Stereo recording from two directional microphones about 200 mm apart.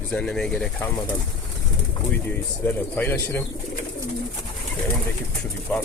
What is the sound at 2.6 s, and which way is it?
Speech, 10° left (ahead or behind).